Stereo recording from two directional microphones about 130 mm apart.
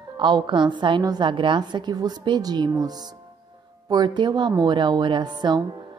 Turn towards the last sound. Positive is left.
turn(degrees=-35)  # may be behind; listen again after turning